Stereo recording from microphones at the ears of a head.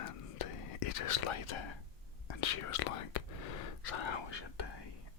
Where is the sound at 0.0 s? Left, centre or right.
Left.